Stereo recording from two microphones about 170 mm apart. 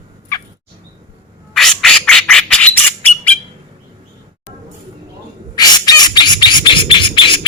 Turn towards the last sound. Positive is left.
turn(degrees=30)  # may be behind; listen again after turning